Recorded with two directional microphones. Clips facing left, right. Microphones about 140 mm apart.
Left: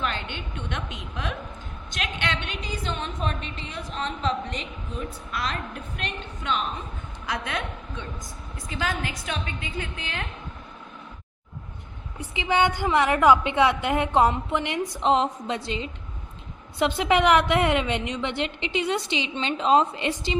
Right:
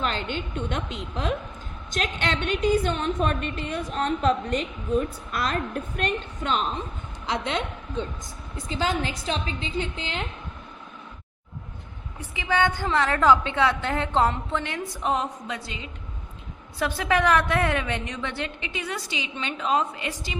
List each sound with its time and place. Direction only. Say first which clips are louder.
0.0 s speech: right 3 dB; 35° right (ahead or behind)
1.9 s a woman's voice: right 3 dB; 45° right (ahead or behind)
7.3 s a woman's voice: right 3 dB; 25° right (ahead or behind)
12.3 s a woman's voice: left 1 dB; 20° left (ahead or behind)